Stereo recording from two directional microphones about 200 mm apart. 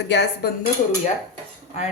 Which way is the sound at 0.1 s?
55° left (ahead or behind).